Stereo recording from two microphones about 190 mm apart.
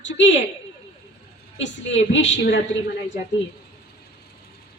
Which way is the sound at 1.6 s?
75° left (ahead or behind).